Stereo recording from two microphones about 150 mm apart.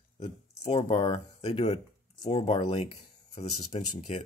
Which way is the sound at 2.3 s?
35° left (ahead or behind).